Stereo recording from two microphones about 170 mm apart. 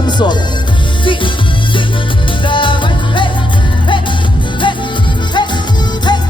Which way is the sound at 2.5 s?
30° left (ahead or behind).